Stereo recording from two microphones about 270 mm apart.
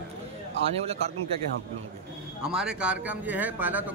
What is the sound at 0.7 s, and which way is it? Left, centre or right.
Speech, right.